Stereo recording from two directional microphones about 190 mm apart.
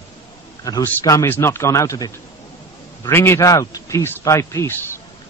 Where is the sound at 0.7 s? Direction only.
20° left (ahead or behind).